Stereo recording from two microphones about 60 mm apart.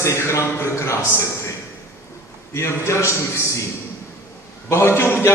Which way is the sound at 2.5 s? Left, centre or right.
Left.